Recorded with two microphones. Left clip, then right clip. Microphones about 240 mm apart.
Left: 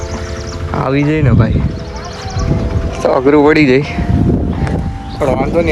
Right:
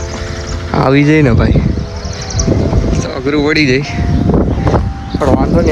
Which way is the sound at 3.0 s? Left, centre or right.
Centre.